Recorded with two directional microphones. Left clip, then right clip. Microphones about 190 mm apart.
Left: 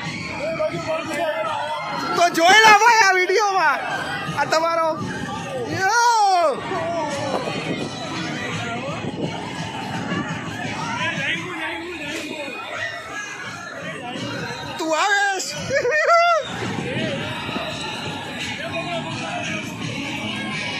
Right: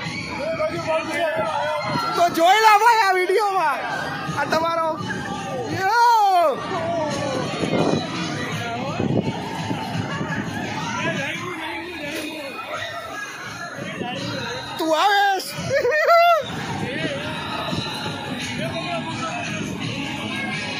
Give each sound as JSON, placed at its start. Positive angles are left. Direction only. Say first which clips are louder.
{"t": 2.1, "sound": "speech", "louder": "left 3 dB", "side_deg": -5}
{"t": 5.8, "sound": "baby cry", "louder": "right 1 dB", "side_deg": -5}
{"t": 14.8, "sound": "music", "louder": "right 2 dB", "side_deg": -20}
{"t": 15.7, "sound": "a sound", "louder": "right 1 dB", "side_deg": -5}